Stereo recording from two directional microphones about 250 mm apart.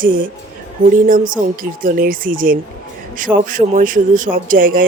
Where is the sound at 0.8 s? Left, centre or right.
Right.